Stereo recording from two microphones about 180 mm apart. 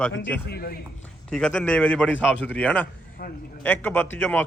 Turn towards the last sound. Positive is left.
turn(degrees=10)  # may be behind; listen again after turning